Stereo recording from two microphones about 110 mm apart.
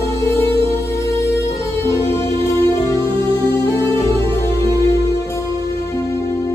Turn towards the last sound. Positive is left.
turn(degrees=30)  # may be behind; listen again after turning